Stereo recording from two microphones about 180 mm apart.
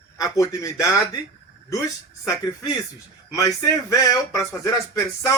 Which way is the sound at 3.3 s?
15° left (ahead or behind).